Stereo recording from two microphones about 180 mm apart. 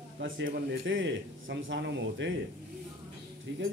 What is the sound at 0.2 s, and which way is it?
A man's voice, 75° right (ahead or behind).